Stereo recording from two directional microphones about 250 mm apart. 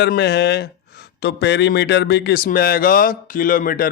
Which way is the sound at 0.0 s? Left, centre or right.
Left.